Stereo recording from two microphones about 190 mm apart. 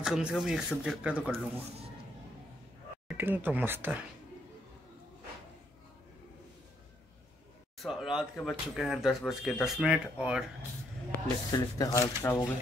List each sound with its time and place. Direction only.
0.0 s speech: 5° right (ahead or behind)
3.1 s speech: 10° right (ahead or behind)
7.8 s speech: centre (ahead or behind)
11.5 s speech: 20° left (ahead or behind)